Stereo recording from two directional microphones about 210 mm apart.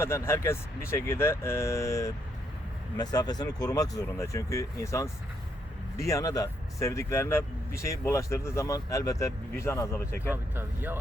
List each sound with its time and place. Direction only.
0.0 s speech: 10° left (ahead or behind)
6.1 s speech: 15° left (ahead or behind)
10.3 s speech: 10° right (ahead or behind)